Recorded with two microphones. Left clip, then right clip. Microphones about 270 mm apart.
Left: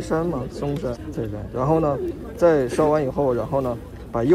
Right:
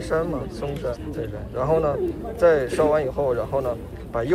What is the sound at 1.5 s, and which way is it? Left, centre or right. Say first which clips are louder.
Speech: even; left.